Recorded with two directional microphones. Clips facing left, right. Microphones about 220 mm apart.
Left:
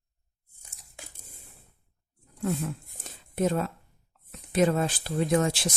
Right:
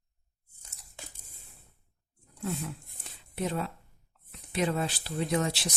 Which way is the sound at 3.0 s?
45° left (ahead or behind).